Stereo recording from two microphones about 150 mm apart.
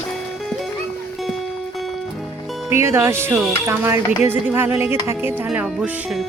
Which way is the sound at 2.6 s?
15° right (ahead or behind).